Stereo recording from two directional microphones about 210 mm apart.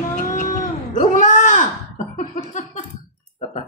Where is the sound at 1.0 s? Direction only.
35° left (ahead or behind).